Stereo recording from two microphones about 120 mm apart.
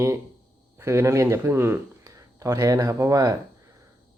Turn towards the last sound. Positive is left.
turn(degrees=-25)  # may be behind; listen again after turning